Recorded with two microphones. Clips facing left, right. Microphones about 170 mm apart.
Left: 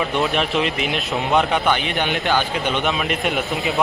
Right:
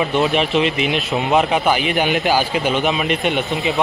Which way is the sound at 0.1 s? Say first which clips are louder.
Right 3 dB; centre (ahead or behind).